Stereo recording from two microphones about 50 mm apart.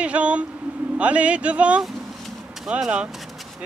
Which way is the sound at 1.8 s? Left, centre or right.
Centre.